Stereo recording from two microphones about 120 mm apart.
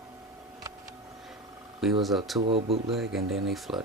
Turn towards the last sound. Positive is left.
turn(degrees=0)  # may be behind; listen again after turning